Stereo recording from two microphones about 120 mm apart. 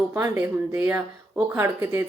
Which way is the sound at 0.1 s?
20° right (ahead or behind).